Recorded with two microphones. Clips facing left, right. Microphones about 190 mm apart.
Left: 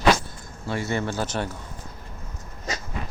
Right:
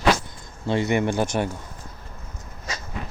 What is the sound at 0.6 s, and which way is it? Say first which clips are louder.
Speech: right 5 dB; 25° right (ahead or behind).